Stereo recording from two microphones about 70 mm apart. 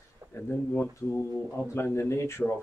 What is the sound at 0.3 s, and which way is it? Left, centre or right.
Speech, left.